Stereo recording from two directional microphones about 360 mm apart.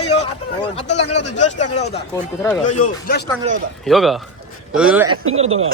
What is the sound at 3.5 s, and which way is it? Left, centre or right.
Speech, centre.